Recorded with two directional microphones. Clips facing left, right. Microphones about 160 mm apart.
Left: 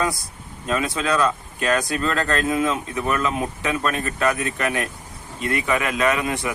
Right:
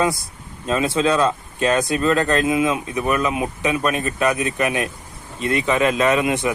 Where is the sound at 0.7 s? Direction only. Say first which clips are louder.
Right 4 dB; 25° right (ahead or behind).